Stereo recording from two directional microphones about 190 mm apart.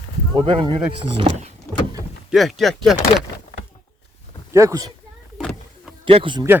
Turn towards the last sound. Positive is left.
turn(degrees=-25)  # may be behind; listen again after turning